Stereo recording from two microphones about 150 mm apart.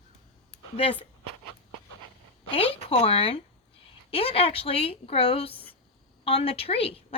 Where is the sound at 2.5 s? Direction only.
40° left (ahead or behind).